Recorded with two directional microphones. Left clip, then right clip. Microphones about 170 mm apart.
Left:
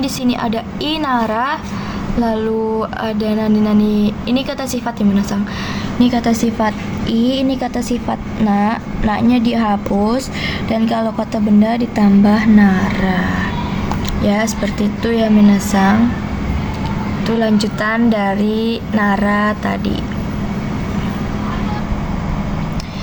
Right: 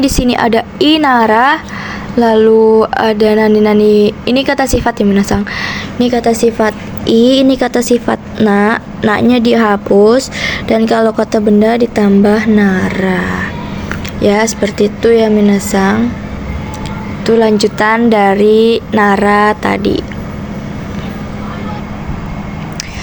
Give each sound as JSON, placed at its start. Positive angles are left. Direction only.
{"t": 0.0, "sound": "a woman's voice", "side_deg": -40}
{"t": 17.2, "sound": "a woman's voice", "side_deg": -35}